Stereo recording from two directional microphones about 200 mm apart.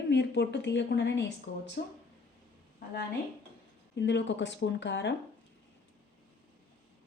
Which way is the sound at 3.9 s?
60° left (ahead or behind).